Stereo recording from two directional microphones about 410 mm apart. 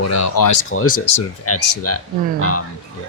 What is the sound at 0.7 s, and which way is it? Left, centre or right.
Speech, left.